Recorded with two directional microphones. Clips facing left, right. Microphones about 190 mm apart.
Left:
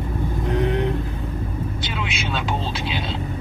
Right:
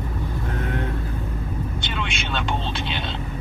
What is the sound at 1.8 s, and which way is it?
Vehicle, 5° left (ahead or behind).